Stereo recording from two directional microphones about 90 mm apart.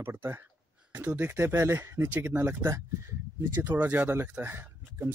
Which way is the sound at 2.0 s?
20° right (ahead or behind).